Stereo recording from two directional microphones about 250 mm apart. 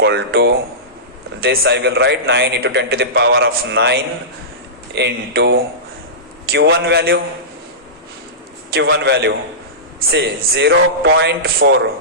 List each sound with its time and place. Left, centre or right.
0.0 s a man's voice: right
8.7 s a man's voice: right